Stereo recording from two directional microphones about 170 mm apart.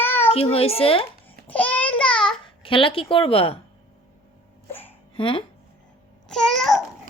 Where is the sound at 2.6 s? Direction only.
30° left (ahead or behind).